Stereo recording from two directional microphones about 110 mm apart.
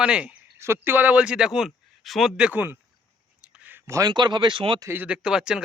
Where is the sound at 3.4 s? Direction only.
10° right (ahead or behind).